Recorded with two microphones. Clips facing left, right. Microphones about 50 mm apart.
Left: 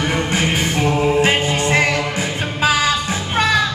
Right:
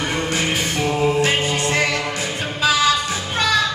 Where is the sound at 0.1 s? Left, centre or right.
Left.